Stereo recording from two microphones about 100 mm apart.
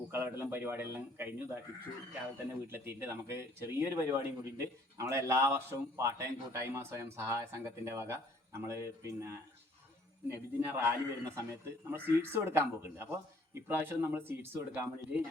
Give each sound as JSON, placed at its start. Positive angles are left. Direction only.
{"t": 0.1, "sound": "a man's voice", "side_deg": -20}
{"t": 2.7, "sound": "a man's voice", "side_deg": -20}